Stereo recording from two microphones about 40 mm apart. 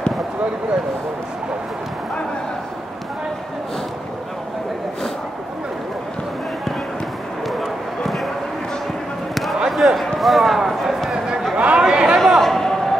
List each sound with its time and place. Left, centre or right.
7.4 s dog: centre
9.3 s basketball bounce: centre
9.7 s a sound: centre
11.5 s chatter: right
11.8 s chatter: right
12.2 s a sound: centre